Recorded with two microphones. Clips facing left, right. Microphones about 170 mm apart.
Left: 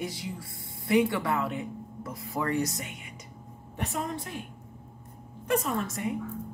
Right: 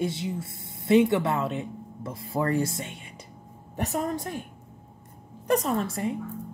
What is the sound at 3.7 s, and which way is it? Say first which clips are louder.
Speech: right 5 dB; 40° right (ahead or behind).